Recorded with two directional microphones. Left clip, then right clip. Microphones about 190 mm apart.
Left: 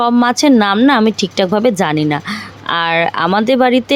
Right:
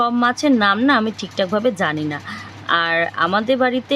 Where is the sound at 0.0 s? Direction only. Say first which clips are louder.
Left 5 dB; 35° left (ahead or behind).